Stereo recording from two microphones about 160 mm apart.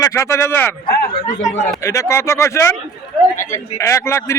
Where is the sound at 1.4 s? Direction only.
50° left (ahead or behind).